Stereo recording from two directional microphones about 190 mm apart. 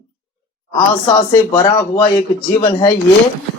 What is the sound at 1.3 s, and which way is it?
Speech, 15° left (ahead or behind).